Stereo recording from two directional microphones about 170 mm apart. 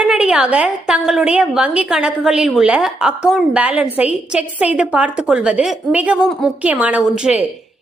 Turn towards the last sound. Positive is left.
turn(degrees=-5)  # may be behind; listen again after turning